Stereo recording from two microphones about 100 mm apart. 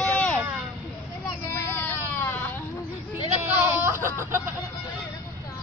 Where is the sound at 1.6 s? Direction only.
20° left (ahead or behind).